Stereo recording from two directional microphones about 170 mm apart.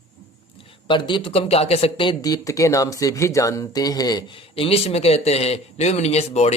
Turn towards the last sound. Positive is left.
turn(degrees=40)  # may be behind; listen again after turning